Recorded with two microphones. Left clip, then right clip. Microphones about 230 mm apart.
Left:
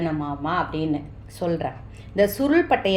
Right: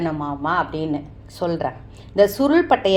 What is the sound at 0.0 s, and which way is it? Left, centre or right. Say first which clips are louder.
A woman's voice: right 3 dB; right.